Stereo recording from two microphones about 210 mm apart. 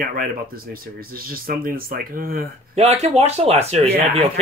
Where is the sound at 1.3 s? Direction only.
45° right (ahead or behind).